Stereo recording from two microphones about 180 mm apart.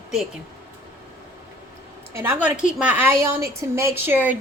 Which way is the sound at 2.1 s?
10° right (ahead or behind).